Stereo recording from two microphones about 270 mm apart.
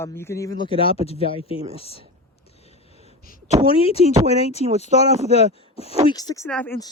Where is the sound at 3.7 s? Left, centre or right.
Centre.